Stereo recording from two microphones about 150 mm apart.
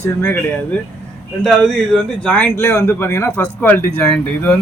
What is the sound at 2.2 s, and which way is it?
A man's voice, 10° left (ahead or behind).